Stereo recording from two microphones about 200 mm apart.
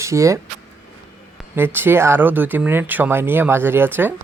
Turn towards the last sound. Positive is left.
turn(degrees=-10)  # may be behind; listen again after turning